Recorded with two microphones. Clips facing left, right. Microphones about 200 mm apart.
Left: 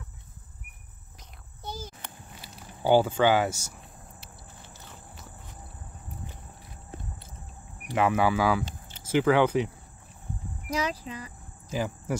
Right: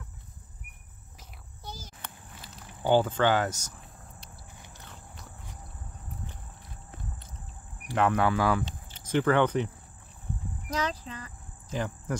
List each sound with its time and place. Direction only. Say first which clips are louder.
2.4 s speech: left 3 dB; 10° left (ahead or behind)
4.7 s a sound: even; 5° left (ahead or behind)
7.9 s speech: left 1 dB; 5° left (ahead or behind)
10.7 s insect: left 2 dB; 10° left (ahead or behind)